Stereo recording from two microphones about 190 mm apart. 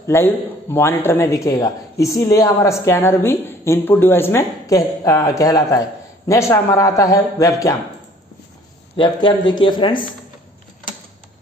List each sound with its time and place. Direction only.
0.0 s speech: 15° left (ahead or behind)
8.9 s speech: 25° left (ahead or behind)